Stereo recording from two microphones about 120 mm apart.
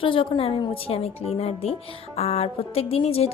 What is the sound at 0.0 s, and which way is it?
A woman's voice, 45° left (ahead or behind).